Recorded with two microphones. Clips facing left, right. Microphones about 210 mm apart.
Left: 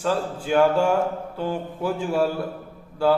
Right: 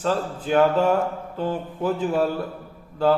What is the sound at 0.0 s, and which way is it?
A man's voice, 5° left (ahead or behind).